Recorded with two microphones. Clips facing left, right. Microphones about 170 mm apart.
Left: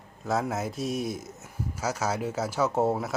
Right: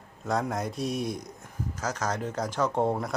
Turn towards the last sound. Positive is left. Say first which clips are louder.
# left 1 dB
turn(degrees=5)  # may be behind; listen again after turning